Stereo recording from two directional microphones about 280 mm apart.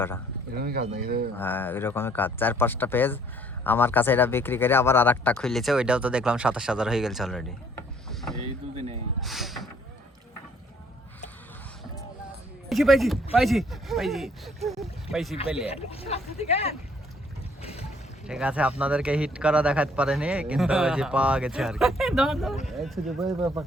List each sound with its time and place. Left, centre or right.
0.5 s speech: right
1.4 s speech: centre
8.7 s speech: right
9.2 s speech: centre
12.6 s speech: centre
15.7 s speech: left
17.6 s a sound: left
18.3 s speech: centre